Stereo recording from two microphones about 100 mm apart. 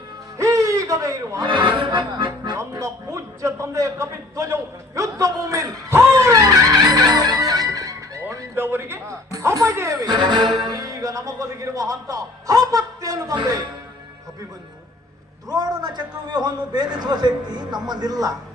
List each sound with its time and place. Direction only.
0.3 s a sound: 35° right (ahead or behind)
1.5 s speech: 55° right (ahead or behind)
2.6 s a man's voice: 30° right (ahead or behind)
15.4 s a man's voice: 40° right (ahead or behind)